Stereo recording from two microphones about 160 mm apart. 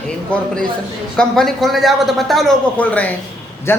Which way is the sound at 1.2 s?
Centre (ahead or behind).